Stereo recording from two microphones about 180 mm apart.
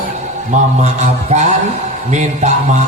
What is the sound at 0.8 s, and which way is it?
A man's voice, 40° right (ahead or behind).